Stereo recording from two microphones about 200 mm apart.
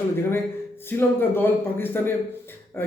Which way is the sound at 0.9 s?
10° left (ahead or behind).